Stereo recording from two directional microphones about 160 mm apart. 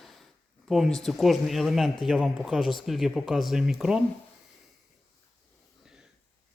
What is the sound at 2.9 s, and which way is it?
Speech, centre (ahead or behind).